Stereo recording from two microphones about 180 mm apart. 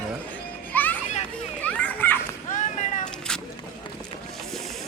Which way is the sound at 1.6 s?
10° left (ahead or behind).